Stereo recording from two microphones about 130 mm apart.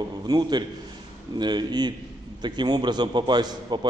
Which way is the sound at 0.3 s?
35° right (ahead or behind).